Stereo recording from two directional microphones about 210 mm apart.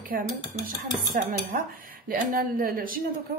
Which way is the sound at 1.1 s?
40° right (ahead or behind).